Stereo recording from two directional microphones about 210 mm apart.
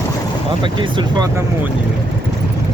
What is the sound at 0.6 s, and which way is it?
Speech, 20° right (ahead or behind).